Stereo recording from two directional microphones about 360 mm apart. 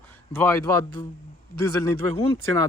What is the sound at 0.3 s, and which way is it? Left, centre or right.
Speech, centre.